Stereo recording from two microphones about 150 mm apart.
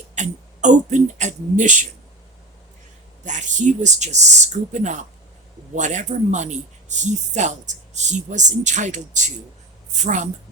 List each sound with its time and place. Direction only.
0.2 s speech: 55° right (ahead or behind)
3.2 s speech: 55° right (ahead or behind)